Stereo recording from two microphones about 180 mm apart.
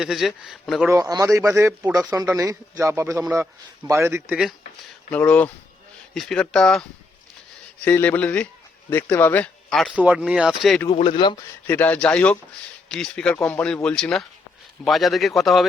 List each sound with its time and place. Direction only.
0.0 s speech: centre (ahead or behind)
0.9 s a man's voice: 20° right (ahead or behind)
5.1 s speech: 5° left (ahead or behind)
7.9 s speech: 10° left (ahead or behind)
10.8 s speech: 35° left (ahead or behind)
11.6 s speech: 10° left (ahead or behind)